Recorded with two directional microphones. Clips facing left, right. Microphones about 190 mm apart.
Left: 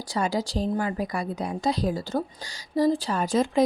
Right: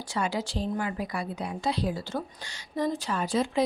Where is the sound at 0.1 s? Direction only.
40° left (ahead or behind).